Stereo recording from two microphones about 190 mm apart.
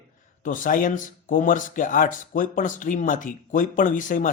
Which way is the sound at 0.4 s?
45° left (ahead or behind).